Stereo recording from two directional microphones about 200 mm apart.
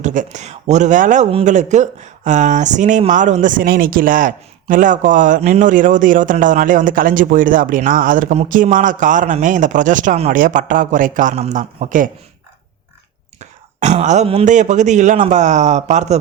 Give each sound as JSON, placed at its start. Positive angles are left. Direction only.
{"t": 0.0, "sound": "speech", "side_deg": -40}
{"t": 13.4, "sound": "speech", "side_deg": -35}